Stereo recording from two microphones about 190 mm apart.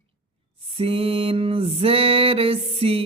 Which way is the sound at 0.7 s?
30° right (ahead or behind).